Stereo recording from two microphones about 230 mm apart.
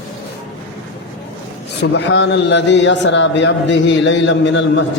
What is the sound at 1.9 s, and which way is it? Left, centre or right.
A man's voice, left.